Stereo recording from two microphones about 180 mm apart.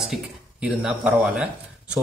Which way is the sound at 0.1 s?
5° right (ahead or behind).